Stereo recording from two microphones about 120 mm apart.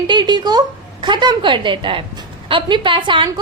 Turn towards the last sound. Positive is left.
turn(degrees=-45)  # may be behind; listen again after turning